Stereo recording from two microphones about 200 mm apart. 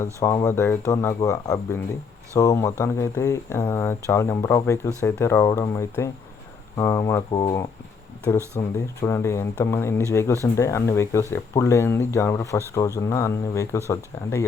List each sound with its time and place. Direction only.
0.0 s speech: 15° left (ahead or behind)